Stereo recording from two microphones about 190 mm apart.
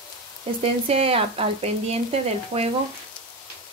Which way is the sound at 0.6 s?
30° right (ahead or behind).